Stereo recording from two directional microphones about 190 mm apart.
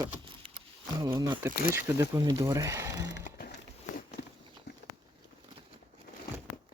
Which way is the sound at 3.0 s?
65° left (ahead or behind).